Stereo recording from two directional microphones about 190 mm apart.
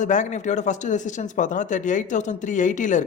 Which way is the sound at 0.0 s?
40° left (ahead or behind).